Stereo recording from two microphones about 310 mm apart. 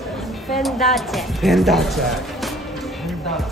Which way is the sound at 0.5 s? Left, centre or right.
Centre.